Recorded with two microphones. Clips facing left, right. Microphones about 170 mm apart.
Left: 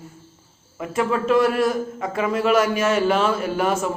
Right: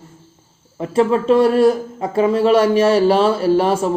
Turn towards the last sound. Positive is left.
turn(degrees=-30)  # may be behind; listen again after turning